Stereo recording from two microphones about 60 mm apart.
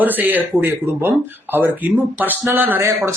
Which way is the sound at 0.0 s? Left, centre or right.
Right.